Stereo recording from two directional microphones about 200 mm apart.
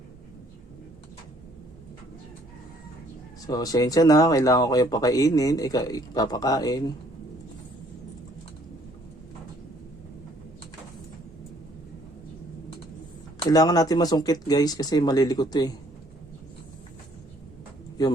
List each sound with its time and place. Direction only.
3.4 s speech: 20° left (ahead or behind)
13.5 s speech: 20° left (ahead or behind)